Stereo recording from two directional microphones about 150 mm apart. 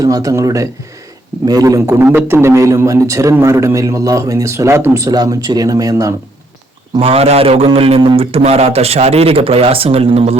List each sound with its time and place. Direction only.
0.0 s a man's voice: 25° right (ahead or behind)
7.0 s a man's voice: 40° right (ahead or behind)